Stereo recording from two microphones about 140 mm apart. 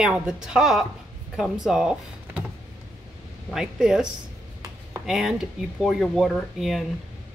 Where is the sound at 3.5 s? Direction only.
5° right (ahead or behind).